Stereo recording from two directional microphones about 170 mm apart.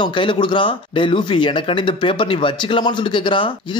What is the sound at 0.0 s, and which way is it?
Speech, 30° left (ahead or behind).